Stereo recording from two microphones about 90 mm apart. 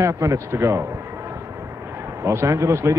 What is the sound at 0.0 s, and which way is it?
Speech, 30° right (ahead or behind).